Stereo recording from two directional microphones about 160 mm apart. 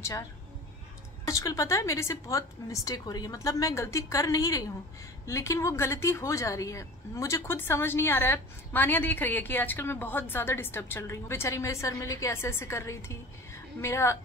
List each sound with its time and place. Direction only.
1.2 s a woman's voice: 20° left (ahead or behind)